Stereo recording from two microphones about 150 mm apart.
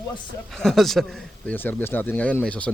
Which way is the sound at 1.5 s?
15° left (ahead or behind).